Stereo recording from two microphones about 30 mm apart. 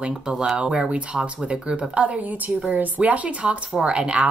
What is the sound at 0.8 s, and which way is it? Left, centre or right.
Speech, right.